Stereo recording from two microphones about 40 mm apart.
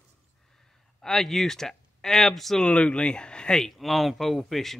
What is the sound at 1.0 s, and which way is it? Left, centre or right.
Speech, centre.